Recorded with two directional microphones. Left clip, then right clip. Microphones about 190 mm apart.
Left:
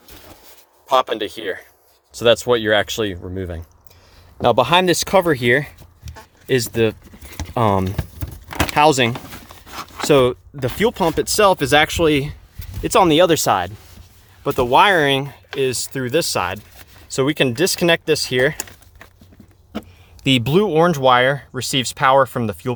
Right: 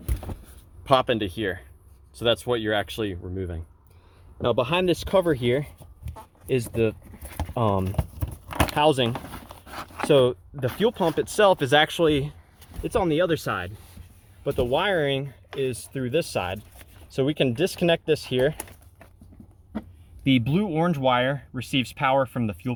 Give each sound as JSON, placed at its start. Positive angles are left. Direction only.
{"t": 0.9, "sound": "speech", "side_deg": 35}
{"t": 7.9, "sound": "keys jangling", "side_deg": 5}
{"t": 8.7, "sound": "speech", "side_deg": 45}
{"t": 9.6, "sound": "a sound", "side_deg": 0}
{"t": 10.1, "sound": "speech", "side_deg": 45}
{"t": 20.2, "sound": "speech", "side_deg": 40}